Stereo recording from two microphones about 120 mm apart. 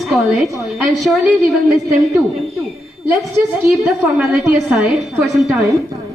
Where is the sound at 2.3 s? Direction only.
Centre (ahead or behind).